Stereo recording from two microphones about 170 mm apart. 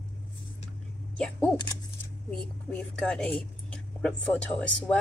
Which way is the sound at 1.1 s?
5° left (ahead or behind).